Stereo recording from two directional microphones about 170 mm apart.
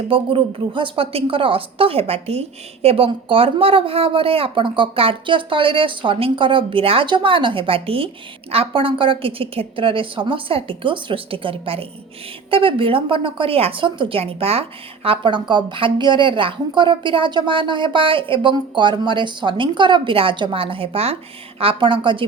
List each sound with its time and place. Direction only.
0.1 s a woman's voice: 30° right (ahead or behind)